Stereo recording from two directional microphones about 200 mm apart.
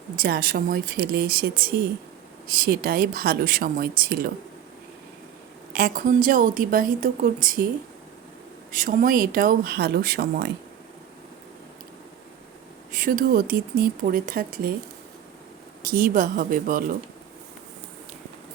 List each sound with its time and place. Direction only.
0.2 s a woman's voice: 45° right (ahead or behind)
5.7 s a woman's voice: 45° right (ahead or behind)
8.7 s a woman's voice: 45° right (ahead or behind)
12.9 s a woman's voice: 40° right (ahead or behind)
15.8 s a woman's voice: 45° right (ahead or behind)